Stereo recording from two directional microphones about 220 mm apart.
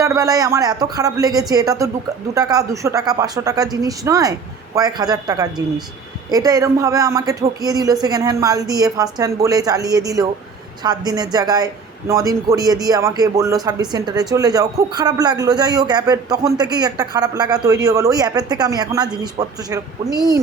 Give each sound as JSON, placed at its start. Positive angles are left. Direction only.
{"t": 0.0, "sound": "speech", "side_deg": -15}